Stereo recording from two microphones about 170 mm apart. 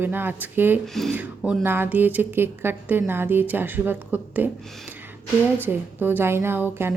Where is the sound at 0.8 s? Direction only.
Centre (ahead or behind).